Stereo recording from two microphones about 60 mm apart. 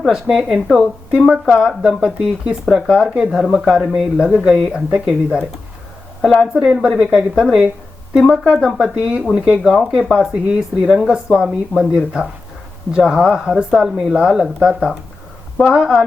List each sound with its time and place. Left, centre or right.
0.0 s speech: centre
1.3 s speech: centre